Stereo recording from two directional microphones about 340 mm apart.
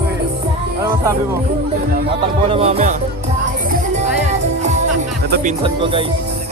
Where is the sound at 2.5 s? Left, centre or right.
Centre.